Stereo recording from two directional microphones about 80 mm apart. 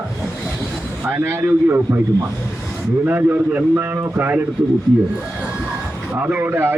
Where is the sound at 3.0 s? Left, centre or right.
Right.